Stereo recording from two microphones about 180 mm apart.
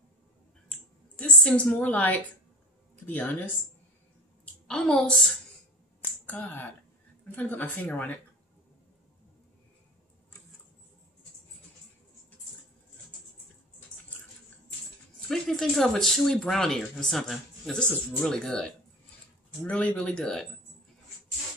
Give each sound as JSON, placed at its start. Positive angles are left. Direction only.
{"t": 0.7, "sound": "a woman's voice", "side_deg": 5}
{"t": 4.6, "sound": "speech", "side_deg": 5}
{"t": 15.1, "sound": "speech", "side_deg": 5}